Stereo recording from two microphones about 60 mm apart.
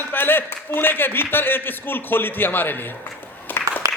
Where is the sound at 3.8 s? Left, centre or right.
Right.